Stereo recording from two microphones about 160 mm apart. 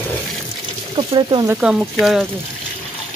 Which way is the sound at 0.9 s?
35° right (ahead or behind).